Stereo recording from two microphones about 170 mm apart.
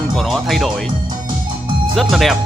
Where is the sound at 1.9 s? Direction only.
Centre (ahead or behind).